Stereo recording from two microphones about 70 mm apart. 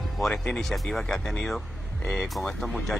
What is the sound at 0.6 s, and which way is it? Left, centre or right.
Speech, centre.